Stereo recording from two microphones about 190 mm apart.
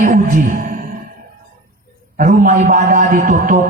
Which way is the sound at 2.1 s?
45° right (ahead or behind).